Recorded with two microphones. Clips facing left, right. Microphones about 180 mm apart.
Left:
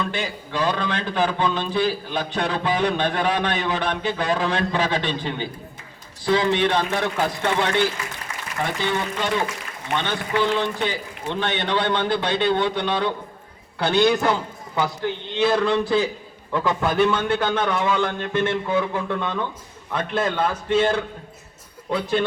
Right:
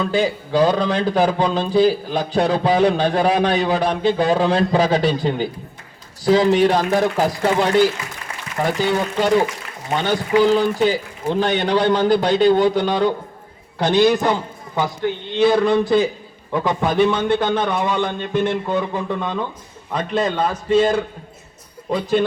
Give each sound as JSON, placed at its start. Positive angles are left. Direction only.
{"t": 0.1, "sound": "a man's voice", "side_deg": -35}
{"t": 13.9, "sound": "speech", "side_deg": -10}
{"t": 15.4, "sound": "speech", "side_deg": -15}
{"t": 21.8, "sound": "a man's voice", "side_deg": 0}